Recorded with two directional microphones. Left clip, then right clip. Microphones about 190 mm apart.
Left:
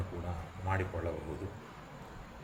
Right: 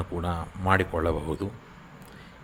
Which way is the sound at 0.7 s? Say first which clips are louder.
Right 12 dB; 40° right (ahead or behind).